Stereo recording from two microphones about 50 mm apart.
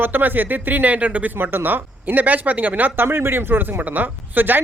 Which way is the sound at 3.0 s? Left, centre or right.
Right.